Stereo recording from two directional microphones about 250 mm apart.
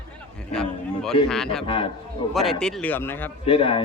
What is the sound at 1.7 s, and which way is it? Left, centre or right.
Speech, left.